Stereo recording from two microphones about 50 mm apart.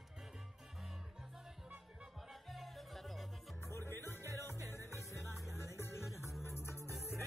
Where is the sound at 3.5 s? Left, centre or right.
Left.